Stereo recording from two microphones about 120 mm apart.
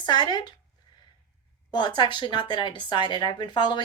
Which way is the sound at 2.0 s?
40° left (ahead or behind).